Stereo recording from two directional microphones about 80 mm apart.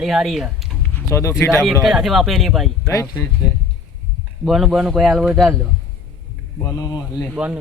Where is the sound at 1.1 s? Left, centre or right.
Left.